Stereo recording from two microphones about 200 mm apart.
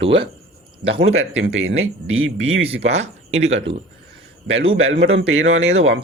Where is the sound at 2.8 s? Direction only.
35° right (ahead or behind).